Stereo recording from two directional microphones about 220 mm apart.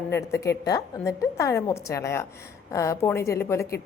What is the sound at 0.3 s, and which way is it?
A woman's voice, 15° left (ahead or behind).